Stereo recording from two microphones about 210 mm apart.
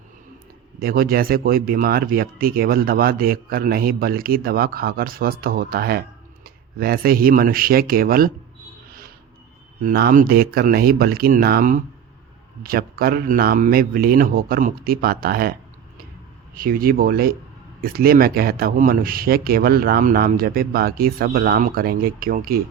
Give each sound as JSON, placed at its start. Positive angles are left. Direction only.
{"t": 0.8, "sound": "speech", "side_deg": -45}
{"t": 9.8, "sound": "speech", "side_deg": -45}
{"t": 16.6, "sound": "speech", "side_deg": -45}